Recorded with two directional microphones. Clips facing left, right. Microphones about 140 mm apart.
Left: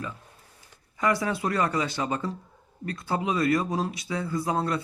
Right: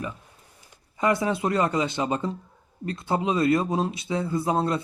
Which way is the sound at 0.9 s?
25° right (ahead or behind).